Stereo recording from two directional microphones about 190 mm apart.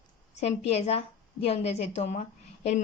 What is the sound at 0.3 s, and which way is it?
Speech, 35° left (ahead or behind).